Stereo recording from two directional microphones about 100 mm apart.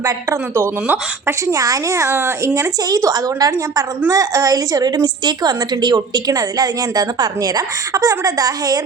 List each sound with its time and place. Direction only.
0.0 s a woman's voice: 30° right (ahead or behind)